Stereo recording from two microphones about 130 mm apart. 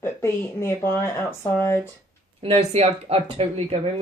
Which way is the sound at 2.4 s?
50° right (ahead or behind).